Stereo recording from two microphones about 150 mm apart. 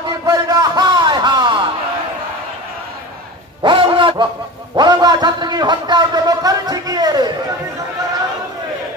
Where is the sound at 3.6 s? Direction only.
35° right (ahead or behind).